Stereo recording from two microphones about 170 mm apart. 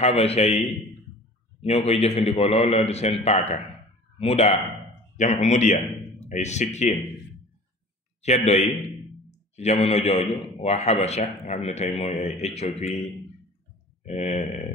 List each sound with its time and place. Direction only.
0.0 s a man's voice: 35° left (ahead or behind)
8.2 s a man's voice: 40° left (ahead or behind)
14.0 s a man's voice: 40° left (ahead or behind)